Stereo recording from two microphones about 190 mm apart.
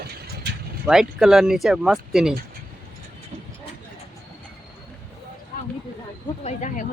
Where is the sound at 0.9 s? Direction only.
Centre (ahead or behind).